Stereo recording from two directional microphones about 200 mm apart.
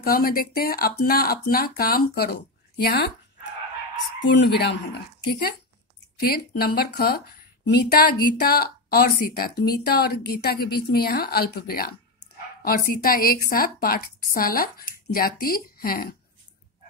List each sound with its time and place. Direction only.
0.0 s speech: 50° left (ahead or behind)
4.3 s speech: 60° left (ahead or behind)